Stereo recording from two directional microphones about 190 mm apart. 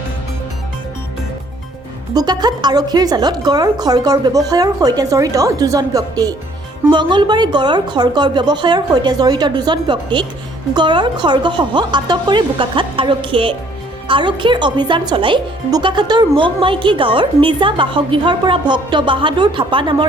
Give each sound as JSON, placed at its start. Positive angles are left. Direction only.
{"t": 2.1, "sound": "speech", "side_deg": -20}